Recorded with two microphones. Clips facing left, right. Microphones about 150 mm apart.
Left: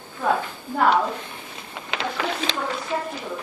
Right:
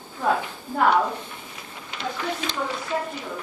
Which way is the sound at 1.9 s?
90° left.